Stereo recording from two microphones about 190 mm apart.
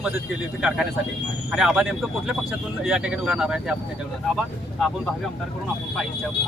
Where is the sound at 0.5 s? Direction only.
5° right (ahead or behind).